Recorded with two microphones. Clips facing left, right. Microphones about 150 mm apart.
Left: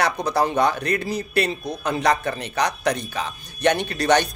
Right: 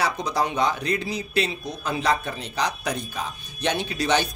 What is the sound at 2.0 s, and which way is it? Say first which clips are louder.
Speech: left 3 dB; 65° left (ahead or behind).